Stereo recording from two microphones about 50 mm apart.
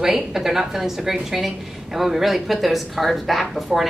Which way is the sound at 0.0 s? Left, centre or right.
Centre.